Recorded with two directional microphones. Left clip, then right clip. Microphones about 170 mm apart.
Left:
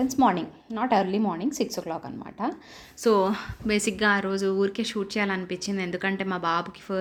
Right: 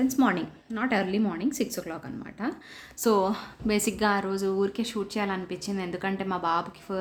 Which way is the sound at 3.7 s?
Centre (ahead or behind).